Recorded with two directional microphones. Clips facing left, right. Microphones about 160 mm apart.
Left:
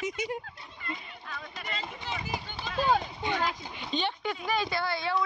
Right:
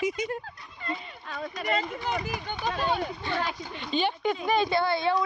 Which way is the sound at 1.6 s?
55° right (ahead or behind).